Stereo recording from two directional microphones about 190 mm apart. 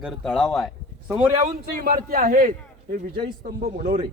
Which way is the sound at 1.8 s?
50° right (ahead or behind).